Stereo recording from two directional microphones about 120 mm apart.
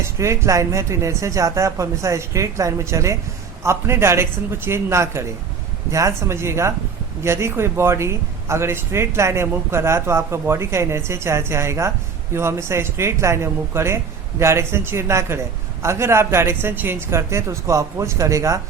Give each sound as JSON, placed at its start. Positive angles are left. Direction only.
{"t": 0.0, "sound": "a man's voice", "side_deg": -25}